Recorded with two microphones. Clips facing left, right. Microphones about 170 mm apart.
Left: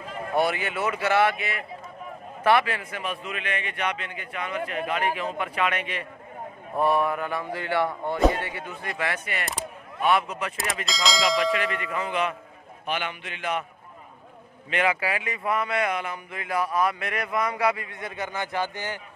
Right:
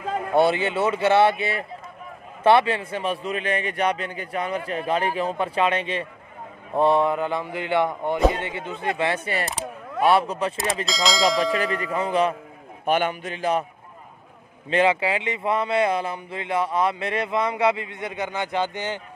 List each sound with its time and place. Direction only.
0.3 s a man's voice: 25° right (ahead or behind)
10.9 s speech: centre (ahead or behind)
11.5 s a man's voice: 35° right (ahead or behind)
12.8 s a man's voice: 45° right (ahead or behind)
14.7 s speech: 25° right (ahead or behind)